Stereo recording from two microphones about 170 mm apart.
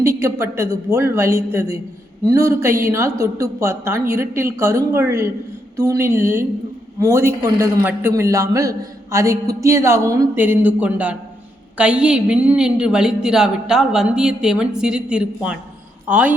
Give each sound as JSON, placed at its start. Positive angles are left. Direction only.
{"t": 0.0, "sound": "a man's voice", "side_deg": -15}